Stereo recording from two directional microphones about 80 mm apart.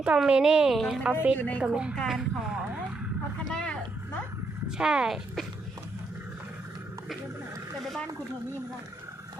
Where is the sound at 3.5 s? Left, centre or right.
Centre.